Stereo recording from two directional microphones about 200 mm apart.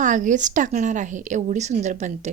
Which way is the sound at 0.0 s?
40° right (ahead or behind).